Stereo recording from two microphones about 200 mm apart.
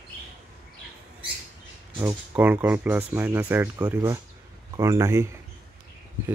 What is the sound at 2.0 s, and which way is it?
Speech, 10° right (ahead or behind).